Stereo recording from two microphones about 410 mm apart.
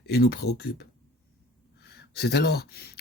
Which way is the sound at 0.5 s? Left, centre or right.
Left.